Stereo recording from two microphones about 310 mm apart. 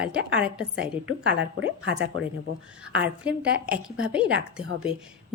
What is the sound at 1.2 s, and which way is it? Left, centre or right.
Speech, right.